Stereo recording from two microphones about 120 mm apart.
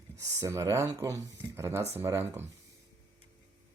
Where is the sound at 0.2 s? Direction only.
25° right (ahead or behind).